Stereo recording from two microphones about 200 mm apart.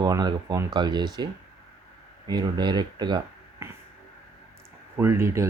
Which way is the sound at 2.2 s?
20° right (ahead or behind).